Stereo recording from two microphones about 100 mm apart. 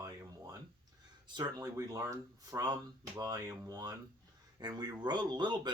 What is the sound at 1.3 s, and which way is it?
Speech, 40° right (ahead or behind).